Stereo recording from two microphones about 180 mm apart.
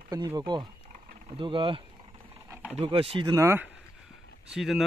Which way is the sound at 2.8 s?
30° right (ahead or behind).